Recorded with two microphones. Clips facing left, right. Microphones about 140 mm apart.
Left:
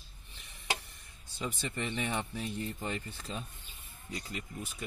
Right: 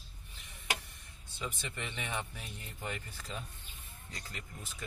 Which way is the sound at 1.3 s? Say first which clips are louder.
Left 4 dB; 40° left (ahead or behind).